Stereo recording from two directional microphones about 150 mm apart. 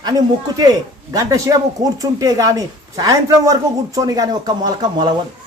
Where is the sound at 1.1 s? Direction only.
20° right (ahead or behind).